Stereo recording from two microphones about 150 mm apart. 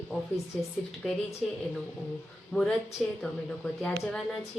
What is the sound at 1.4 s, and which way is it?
Speech, centre (ahead or behind).